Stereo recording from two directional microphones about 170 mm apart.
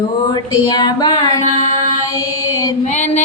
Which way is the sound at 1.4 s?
45° left (ahead or behind).